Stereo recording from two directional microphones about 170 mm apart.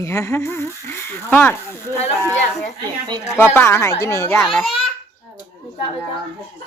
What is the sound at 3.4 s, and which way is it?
Speech, 15° left (ahead or behind).